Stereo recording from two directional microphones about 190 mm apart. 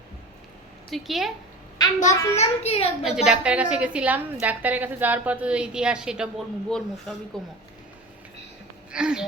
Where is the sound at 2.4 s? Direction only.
30° left (ahead or behind).